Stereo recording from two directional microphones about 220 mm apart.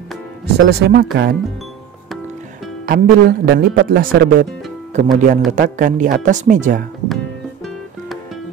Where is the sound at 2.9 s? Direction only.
40° right (ahead or behind).